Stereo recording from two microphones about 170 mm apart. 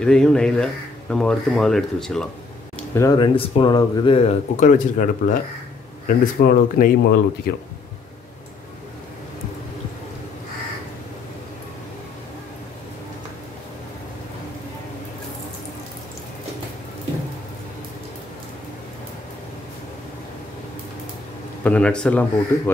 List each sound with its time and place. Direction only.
0.0 s speech: 5° left (ahead or behind)
2.9 s speech: 20° left (ahead or behind)
4.6 s speech: 50° left (ahead or behind)
21.6 s speech: 5° left (ahead or behind)